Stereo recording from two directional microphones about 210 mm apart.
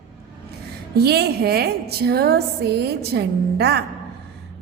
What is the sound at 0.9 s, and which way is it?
A woman's voice, 50° right (ahead or behind).